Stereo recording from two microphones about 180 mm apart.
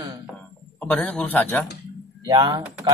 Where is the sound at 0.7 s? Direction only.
10° left (ahead or behind).